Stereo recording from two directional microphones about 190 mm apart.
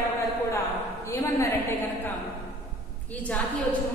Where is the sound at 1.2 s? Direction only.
15° left (ahead or behind).